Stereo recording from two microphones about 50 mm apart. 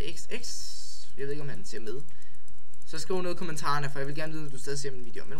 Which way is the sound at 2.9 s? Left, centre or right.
Centre.